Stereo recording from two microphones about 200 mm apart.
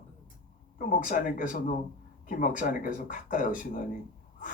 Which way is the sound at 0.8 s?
40° left (ahead or behind).